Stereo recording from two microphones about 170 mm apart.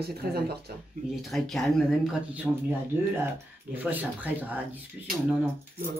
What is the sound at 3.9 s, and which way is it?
Speech, 10° right (ahead or behind).